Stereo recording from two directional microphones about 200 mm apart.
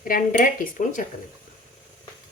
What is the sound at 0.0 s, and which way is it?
Speech, 45° left (ahead or behind).